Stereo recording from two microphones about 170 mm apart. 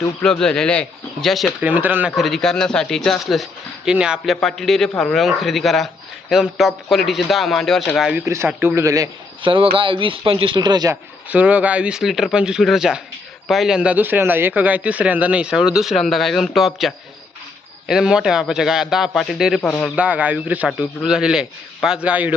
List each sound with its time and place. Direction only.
0.2 s a man's voice: 5° left (ahead or behind)
1.6 s a man's voice: 10° right (ahead or behind)
8.2 s a man's voice: 15° right (ahead or behind)
11.3 s a man's voice: 10° right (ahead or behind)